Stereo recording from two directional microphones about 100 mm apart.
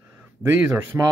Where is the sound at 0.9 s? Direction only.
15° right (ahead or behind).